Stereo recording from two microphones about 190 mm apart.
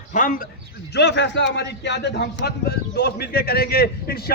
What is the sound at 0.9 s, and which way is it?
Speech, 65° left (ahead or behind).